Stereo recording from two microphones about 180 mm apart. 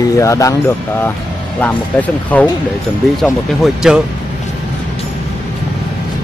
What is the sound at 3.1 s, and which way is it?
Speech, centre (ahead or behind).